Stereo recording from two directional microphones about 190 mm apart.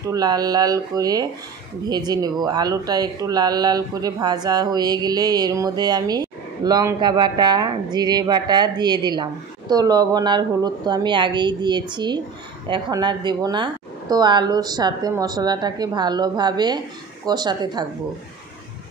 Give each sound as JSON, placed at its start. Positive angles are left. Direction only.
{"t": 0.1, "sound": "speech", "side_deg": -20}